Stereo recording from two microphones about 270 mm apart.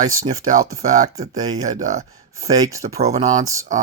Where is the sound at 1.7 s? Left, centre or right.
Right.